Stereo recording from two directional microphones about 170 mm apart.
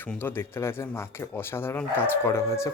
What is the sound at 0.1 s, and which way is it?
Speech, 10° left (ahead or behind).